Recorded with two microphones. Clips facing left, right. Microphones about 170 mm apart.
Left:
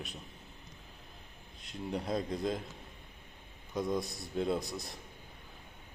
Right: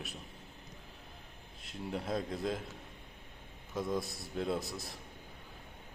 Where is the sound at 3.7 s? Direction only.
Centre (ahead or behind).